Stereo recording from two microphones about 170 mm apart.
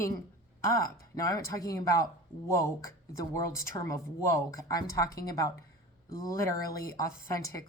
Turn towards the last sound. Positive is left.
turn(degrees=20)  # may be behind; listen again after turning